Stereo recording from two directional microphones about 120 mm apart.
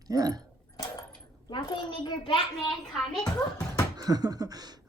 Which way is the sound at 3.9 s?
30° right (ahead or behind).